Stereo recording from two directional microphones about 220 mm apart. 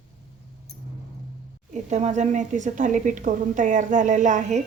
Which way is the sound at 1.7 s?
30° right (ahead or behind).